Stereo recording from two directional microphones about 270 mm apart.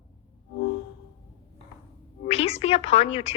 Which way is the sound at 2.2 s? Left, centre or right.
Left.